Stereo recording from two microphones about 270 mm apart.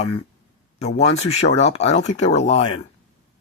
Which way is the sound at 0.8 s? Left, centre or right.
Left.